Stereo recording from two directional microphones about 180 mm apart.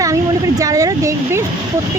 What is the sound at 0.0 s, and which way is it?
Speech, 20° right (ahead or behind).